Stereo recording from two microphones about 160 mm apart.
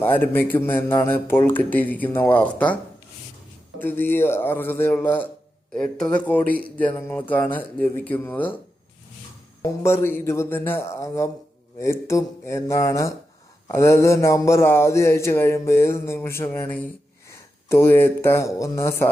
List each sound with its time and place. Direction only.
0.0 s speech: 10° left (ahead or behind)
3.8 s speech: 10° left (ahead or behind)
9.6 s speech: 15° left (ahead or behind)